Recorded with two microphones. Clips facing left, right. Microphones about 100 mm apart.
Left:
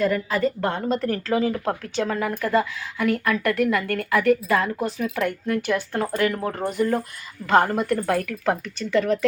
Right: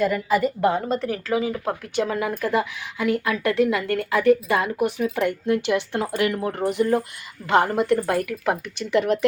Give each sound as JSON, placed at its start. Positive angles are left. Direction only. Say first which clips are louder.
{"t": 0.0, "sound": "a woman's voice", "louder": "right 1 dB", "side_deg": -5}